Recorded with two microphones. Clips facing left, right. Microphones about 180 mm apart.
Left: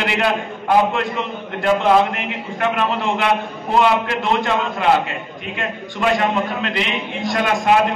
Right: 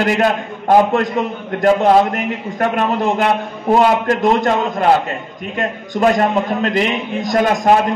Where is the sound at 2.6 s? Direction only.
40° right (ahead or behind).